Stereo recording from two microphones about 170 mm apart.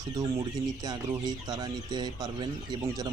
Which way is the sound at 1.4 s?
25° right (ahead or behind).